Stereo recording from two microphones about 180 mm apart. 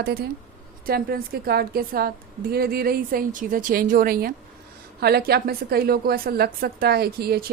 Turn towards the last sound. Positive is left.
turn(degrees=-60)  # may be behind; listen again after turning